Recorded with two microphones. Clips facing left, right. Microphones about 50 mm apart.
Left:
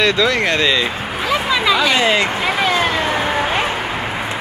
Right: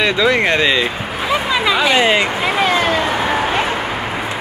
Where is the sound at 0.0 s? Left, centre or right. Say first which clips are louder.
Right 1 dB; centre.